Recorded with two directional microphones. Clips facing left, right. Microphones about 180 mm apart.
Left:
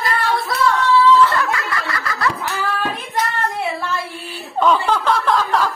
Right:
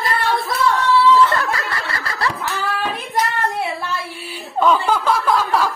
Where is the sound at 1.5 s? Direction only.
30° right (ahead or behind).